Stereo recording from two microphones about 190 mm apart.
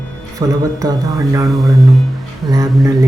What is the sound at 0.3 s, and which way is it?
A man's voice, 20° right (ahead or behind).